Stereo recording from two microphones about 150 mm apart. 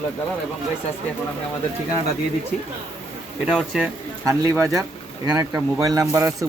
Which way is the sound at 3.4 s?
5° right (ahead or behind).